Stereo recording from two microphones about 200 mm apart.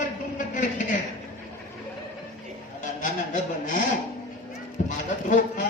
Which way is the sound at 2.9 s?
40° left (ahead or behind).